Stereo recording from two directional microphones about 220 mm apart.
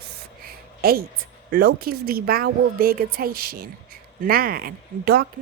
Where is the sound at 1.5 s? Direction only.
40° right (ahead or behind).